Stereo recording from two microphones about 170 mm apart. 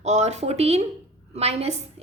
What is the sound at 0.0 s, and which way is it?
A woman's voice, 40° right (ahead or behind).